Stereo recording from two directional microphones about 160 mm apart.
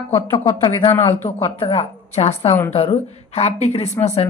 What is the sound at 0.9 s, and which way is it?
Speech, 15° left (ahead or behind).